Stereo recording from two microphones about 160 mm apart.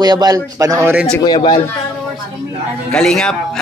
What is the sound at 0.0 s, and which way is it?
Speech, 25° right (ahead or behind).